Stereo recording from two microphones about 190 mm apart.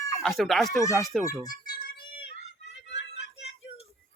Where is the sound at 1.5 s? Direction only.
20° left (ahead or behind).